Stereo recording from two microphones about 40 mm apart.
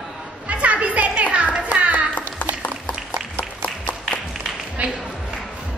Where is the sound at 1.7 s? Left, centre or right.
Right.